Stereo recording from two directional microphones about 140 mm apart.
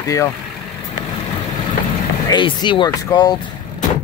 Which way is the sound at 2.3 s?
35° left (ahead or behind).